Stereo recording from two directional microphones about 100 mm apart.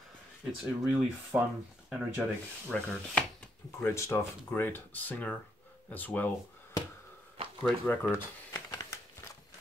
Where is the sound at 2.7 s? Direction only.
10° left (ahead or behind).